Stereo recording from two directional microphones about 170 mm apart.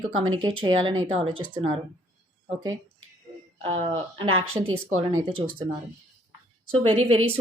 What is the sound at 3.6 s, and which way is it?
A woman's voice, 35° right (ahead or behind).